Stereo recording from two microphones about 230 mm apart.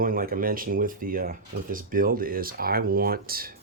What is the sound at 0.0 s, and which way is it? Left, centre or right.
Speech, right.